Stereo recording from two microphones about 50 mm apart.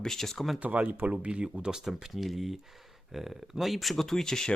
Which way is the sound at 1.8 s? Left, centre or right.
Centre.